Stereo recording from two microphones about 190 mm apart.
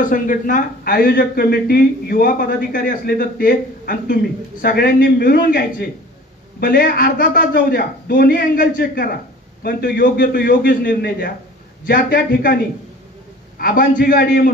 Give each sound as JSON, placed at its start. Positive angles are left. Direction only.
{"t": 0.0, "sound": "speech", "side_deg": 45}
{"t": 13.6, "sound": "speech", "side_deg": 50}